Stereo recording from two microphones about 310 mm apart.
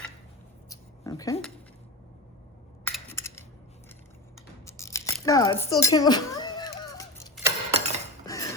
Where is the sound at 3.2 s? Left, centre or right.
Centre.